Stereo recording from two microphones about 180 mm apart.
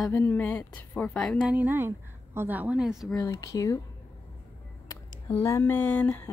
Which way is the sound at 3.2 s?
15° left (ahead or behind).